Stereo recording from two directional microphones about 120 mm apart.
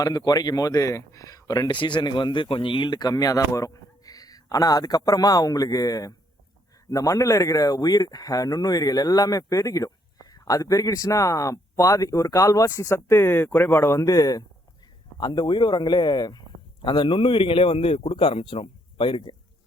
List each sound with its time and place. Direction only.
0.0 s a man's voice: 35° left (ahead or behind)